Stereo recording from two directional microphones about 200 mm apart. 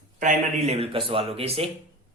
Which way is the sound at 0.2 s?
35° right (ahead or behind).